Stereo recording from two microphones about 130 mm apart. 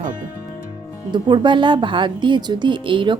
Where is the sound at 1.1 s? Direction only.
35° right (ahead or behind).